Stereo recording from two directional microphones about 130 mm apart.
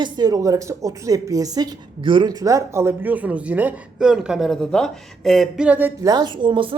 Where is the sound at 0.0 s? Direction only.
30° right (ahead or behind); by 5.9 s 10° right (ahead or behind).